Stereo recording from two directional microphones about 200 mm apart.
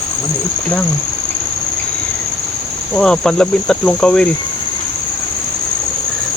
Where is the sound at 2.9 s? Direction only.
5° left (ahead or behind).